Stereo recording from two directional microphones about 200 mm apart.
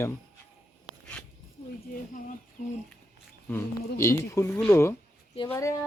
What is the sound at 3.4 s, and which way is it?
Speech, 10° left (ahead or behind).